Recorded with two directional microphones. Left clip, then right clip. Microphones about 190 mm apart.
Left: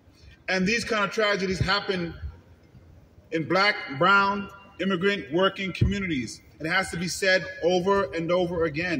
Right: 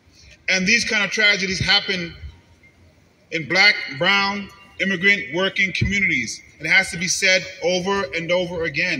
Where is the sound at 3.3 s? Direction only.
40° left (ahead or behind).